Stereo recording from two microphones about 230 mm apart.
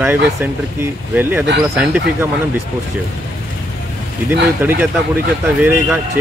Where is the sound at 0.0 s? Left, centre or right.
Centre.